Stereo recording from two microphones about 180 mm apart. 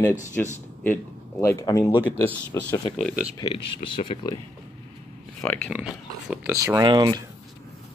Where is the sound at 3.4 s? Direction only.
30° left (ahead or behind).